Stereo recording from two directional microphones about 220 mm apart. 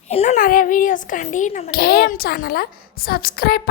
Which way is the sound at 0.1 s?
30° left (ahead or behind).